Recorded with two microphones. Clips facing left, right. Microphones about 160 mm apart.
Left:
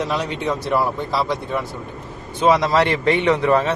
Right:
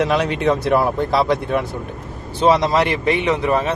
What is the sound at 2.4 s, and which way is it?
A man's voice, 25° right (ahead or behind).